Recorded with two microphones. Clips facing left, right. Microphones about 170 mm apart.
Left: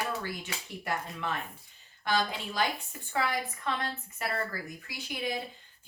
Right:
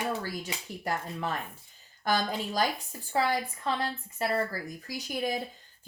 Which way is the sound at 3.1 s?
30° right (ahead or behind).